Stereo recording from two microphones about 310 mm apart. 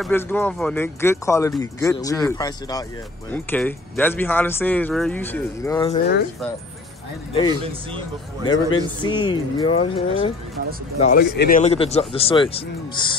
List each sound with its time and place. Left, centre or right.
0.0 s speech: centre
7.6 s speech: centre
8.7 s speech: centre
11.1 s speech: left